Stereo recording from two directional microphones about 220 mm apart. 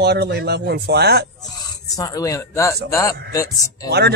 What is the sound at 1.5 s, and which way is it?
A man's voice, 15° left (ahead or behind).